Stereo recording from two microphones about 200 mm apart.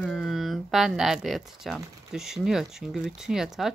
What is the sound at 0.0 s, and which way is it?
Speech, centre (ahead or behind).